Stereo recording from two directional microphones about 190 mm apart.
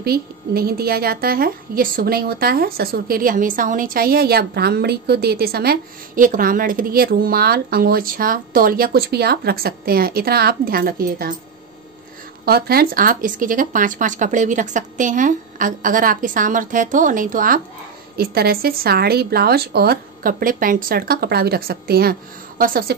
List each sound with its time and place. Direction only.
0.0 s a woman's voice: 55° right (ahead or behind)
12.4 s a woman's voice: 55° right (ahead or behind)